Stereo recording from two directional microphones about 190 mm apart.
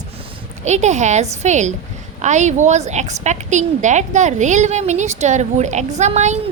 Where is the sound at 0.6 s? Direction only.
35° right (ahead or behind).